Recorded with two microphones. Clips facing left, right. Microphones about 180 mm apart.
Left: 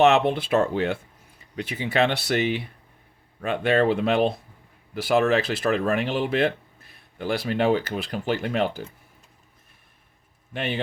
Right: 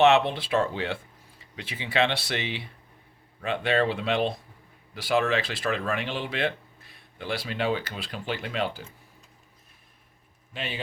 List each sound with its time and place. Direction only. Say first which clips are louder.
0.0 s speech: left 2 dB; 45° left (ahead or behind)
10.5 s a man's voice: left 7 dB; 55° left (ahead or behind)